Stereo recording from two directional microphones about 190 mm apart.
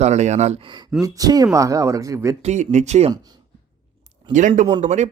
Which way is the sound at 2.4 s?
40° right (ahead or behind).